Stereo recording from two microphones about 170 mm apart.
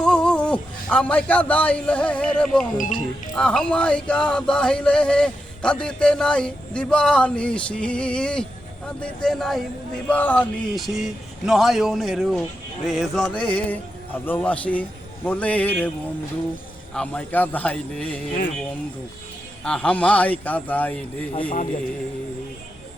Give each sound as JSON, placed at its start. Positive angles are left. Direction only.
{"t": 0.0, "sound": "a man's voice", "side_deg": 5}
{"t": 2.7, "sound": "speech", "side_deg": 50}
{"t": 3.3, "sound": "music", "side_deg": 5}
{"t": 12.8, "sound": "speech", "side_deg": 0}
{"t": 16.9, "sound": "speech", "side_deg": 5}
{"t": 19.6, "sound": "speech", "side_deg": 5}